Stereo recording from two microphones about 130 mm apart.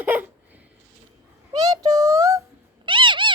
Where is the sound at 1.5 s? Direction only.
30° right (ahead or behind).